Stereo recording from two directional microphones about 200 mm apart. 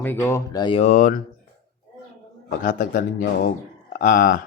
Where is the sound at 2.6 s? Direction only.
45° left (ahead or behind).